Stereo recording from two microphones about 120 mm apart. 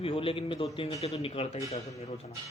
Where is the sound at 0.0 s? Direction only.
50° left (ahead or behind).